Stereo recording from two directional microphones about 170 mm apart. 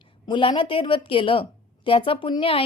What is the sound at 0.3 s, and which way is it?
A woman's voice, 30° left (ahead or behind).